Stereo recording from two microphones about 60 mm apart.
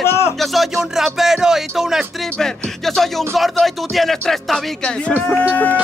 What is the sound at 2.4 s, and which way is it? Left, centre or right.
Speech, centre.